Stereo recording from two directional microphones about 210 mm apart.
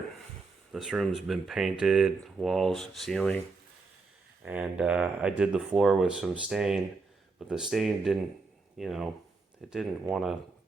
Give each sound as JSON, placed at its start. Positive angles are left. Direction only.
{"t": 0.7, "sound": "speech", "side_deg": 0}
{"t": 4.4, "sound": "speech", "side_deg": -5}